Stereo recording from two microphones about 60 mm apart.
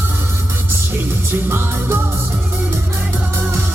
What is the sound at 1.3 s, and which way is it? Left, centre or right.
Music, right.